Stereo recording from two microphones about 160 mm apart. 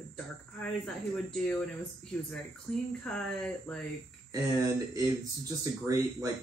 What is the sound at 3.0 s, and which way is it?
Speech, 5° left (ahead or behind).